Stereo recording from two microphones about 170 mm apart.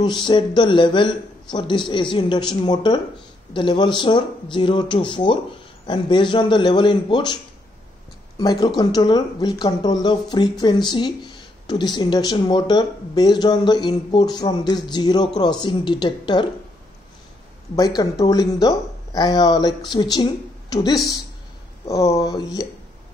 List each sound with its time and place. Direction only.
0.0 s speech: 25° left (ahead or behind)
8.4 s speech: 25° left (ahead or behind)
17.7 s speech: 20° left (ahead or behind)